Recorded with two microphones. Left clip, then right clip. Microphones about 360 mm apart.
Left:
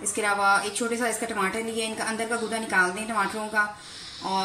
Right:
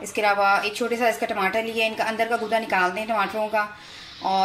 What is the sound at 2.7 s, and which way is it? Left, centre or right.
Speech, centre.